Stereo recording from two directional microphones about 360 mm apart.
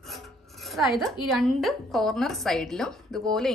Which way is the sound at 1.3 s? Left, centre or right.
Centre.